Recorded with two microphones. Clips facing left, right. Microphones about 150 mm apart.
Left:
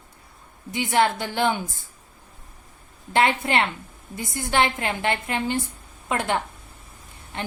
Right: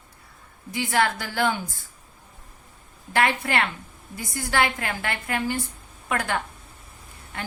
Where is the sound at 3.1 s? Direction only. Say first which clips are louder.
Left 2 dB; 20° left (ahead or behind).